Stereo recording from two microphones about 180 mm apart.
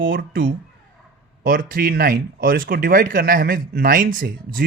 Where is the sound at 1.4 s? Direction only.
50° right (ahead or behind).